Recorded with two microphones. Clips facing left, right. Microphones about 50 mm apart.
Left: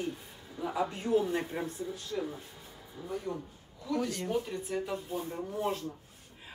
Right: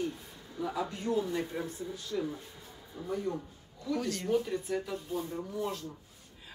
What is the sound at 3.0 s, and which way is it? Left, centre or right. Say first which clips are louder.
Speech: right 3 dB; centre.